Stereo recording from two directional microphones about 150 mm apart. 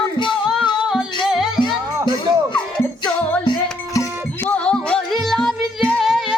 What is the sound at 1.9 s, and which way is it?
Music, 25° right (ahead or behind).